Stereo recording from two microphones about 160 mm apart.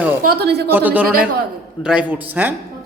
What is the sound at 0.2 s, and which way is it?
Speech, 80° right.